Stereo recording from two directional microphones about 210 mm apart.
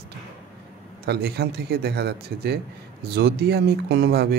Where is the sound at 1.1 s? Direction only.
50° right (ahead or behind).